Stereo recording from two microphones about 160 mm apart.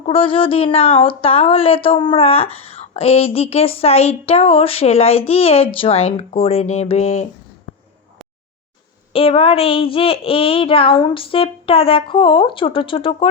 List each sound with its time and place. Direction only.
0.0 s speech: 35° left (ahead or behind)
9.1 s speech: 35° left (ahead or behind)